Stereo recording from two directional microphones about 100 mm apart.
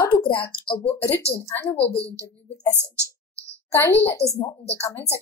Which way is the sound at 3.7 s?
25° left (ahead or behind).